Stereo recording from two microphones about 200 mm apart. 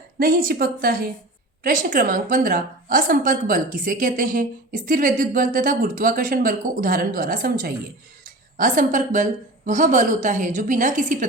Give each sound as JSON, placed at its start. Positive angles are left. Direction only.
{"t": 0.2, "sound": "a woman's voice", "side_deg": -45}